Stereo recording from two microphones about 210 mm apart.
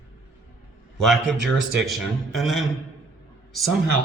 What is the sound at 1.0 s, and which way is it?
A man's voice, centre (ahead or behind).